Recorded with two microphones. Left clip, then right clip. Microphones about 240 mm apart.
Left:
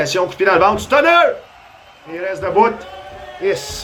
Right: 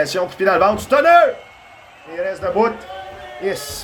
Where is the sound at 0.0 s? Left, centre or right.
Right.